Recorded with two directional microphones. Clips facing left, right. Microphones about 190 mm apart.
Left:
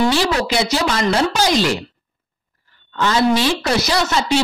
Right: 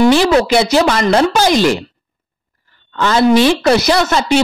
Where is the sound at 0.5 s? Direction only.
60° right (ahead or behind).